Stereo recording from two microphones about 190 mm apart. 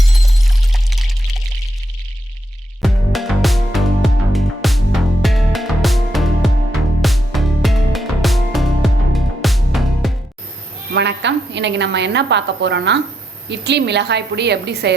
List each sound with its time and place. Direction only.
0.1 s a sound: centre (ahead or behind)
2.8 s music: centre (ahead or behind)
10.9 s a woman's voice: 65° right (ahead or behind)